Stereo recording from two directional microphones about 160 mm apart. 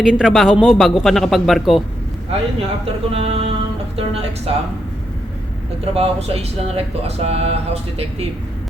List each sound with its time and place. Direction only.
0.0 s a man's voice: 5° right (ahead or behind)
2.6 s speech: 35° right (ahead or behind)
5.8 s speech: 40° right (ahead or behind)